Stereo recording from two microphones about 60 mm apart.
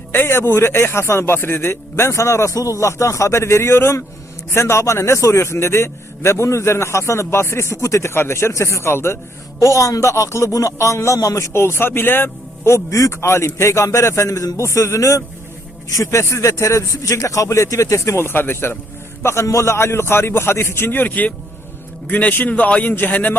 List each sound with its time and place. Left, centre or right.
0.1 s speech: left
8.1 s speech: left
9.6 s a man's voice: left